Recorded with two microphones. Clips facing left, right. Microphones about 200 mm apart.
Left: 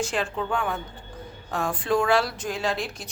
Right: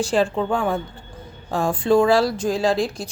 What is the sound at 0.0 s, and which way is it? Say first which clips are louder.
A woman's voice: right 7 dB; 35° right (ahead or behind).